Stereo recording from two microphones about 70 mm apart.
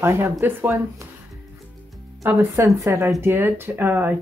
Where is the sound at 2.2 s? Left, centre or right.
Right.